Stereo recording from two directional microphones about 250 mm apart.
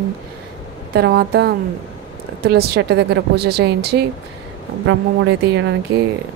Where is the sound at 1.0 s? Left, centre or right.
Right.